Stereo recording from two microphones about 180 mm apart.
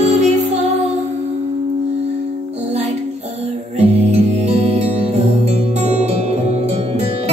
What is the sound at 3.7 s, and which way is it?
Music, 35° right (ahead or behind).